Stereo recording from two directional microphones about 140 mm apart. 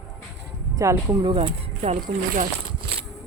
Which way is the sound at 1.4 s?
55° right (ahead or behind).